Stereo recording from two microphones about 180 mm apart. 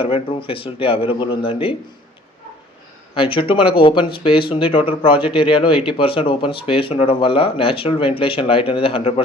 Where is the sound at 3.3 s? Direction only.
30° left (ahead or behind).